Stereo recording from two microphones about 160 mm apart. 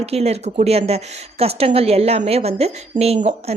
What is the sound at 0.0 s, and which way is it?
Speech, 40° right (ahead or behind).